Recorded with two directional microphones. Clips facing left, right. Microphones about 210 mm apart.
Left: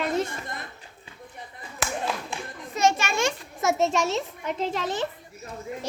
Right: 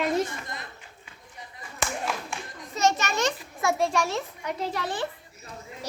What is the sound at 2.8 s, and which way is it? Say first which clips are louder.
A child's voice: left 1 dB; 10° left (ahead or behind).